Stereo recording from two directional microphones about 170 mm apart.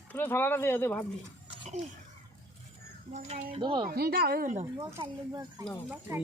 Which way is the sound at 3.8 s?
70° right (ahead or behind).